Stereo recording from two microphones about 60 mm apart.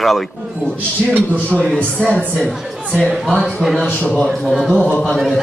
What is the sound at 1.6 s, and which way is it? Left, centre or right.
Speech, centre.